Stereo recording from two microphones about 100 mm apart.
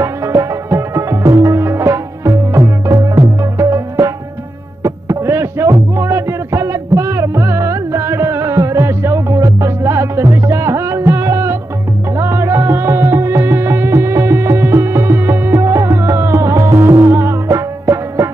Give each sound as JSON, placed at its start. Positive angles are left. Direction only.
{"t": 0.0, "sound": "music", "side_deg": -30}